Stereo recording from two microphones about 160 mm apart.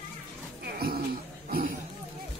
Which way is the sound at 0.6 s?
75° right (ahead or behind).